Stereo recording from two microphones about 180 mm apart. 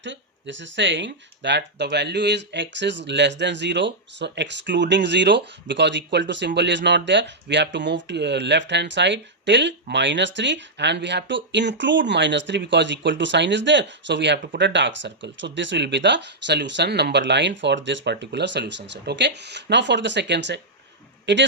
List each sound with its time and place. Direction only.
0.0 s a man's voice: 90° right